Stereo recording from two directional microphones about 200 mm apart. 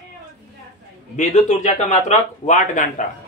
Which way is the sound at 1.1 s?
35° left (ahead or behind).